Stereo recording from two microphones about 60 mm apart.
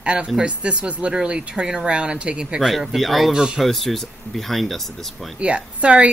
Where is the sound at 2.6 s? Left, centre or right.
Centre.